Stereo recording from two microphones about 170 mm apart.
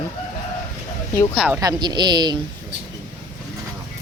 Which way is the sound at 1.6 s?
25° right (ahead or behind).